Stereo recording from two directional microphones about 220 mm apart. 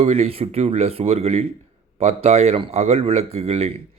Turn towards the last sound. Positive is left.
turn(degrees=-30)  # may be behind; listen again after turning